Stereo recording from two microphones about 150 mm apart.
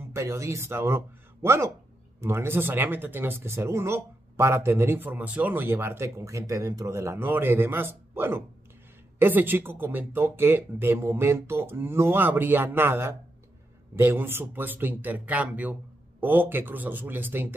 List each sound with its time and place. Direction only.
0.1 s speech: 20° right (ahead or behind)